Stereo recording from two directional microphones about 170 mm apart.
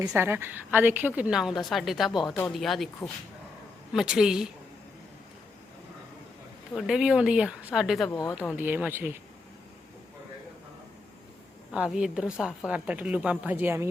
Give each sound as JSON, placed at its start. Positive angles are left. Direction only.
{"t": 0.1, "sound": "a woman's voice", "side_deg": -15}
{"t": 3.9, "sound": "a woman's voice", "side_deg": -5}
{"t": 6.7, "sound": "a woman's voice", "side_deg": -5}
{"t": 8.1, "sound": "speech", "side_deg": 20}
{"t": 8.4, "sound": "a woman's voice", "side_deg": -10}
{"t": 11.7, "sound": "a woman's voice", "side_deg": -5}